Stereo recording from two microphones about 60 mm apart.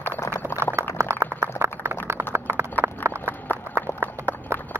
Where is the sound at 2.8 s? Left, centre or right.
Right.